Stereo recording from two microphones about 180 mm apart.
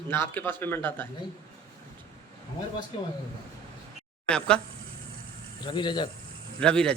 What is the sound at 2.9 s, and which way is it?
Speech, 30° left (ahead or behind).